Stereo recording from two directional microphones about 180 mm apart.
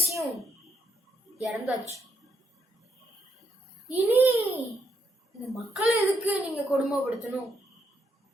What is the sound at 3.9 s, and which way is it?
A child's voice, 10° right (ahead or behind).